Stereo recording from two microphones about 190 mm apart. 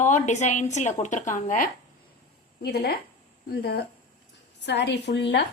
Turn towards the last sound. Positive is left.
turn(degrees=65)  # may be behind; listen again after turning